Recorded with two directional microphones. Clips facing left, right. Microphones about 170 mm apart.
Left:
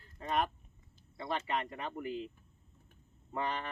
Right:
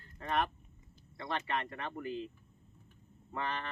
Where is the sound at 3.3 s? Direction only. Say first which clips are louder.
Left 2 dB; 15° left (ahead or behind).